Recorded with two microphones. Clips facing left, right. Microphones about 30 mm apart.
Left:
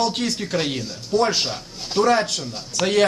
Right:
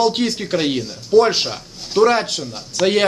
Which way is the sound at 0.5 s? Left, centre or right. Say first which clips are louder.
Right 5 dB; centre.